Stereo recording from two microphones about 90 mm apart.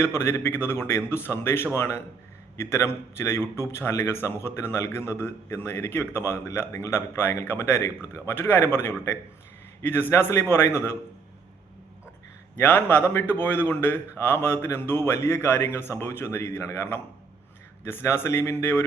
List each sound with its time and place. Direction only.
0.0 s a man's voice: 30° left (ahead or behind)
12.5 s a man's voice: 20° left (ahead or behind)